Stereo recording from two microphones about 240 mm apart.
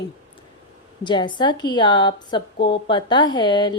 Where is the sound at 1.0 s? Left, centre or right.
Centre.